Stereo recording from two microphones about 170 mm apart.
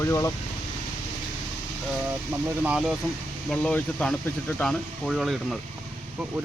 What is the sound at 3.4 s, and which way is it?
Speech, 5° left (ahead or behind).